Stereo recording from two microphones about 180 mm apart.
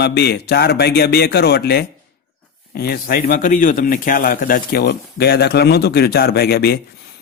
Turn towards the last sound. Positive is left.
turn(degrees=60)  # may be behind; listen again after turning